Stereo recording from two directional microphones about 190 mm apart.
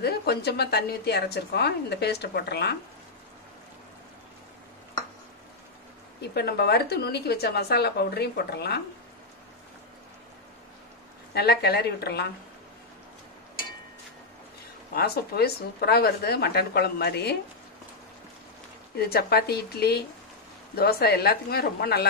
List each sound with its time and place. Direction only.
0.0 s a woman's voice: 60° left (ahead or behind)
6.2 s a woman's voice: 60° left (ahead or behind)
11.3 s a woman's voice: 60° left (ahead or behind)
15.0 s a woman's voice: 55° left (ahead or behind)
18.9 s a woman's voice: 55° left (ahead or behind)